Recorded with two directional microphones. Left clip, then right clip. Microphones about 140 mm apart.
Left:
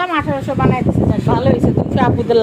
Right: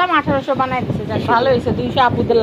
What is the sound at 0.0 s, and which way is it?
Speech, 5° left (ahead or behind).